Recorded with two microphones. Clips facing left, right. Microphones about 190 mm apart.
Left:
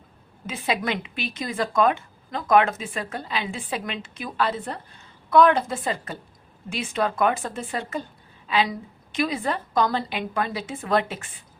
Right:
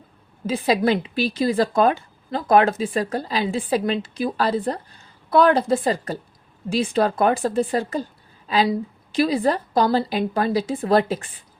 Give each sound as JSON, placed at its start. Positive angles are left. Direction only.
{"t": 0.4, "sound": "a woman's voice", "side_deg": -35}